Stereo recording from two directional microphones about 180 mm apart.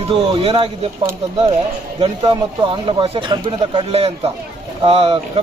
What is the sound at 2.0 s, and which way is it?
A man's voice, 25° right (ahead or behind).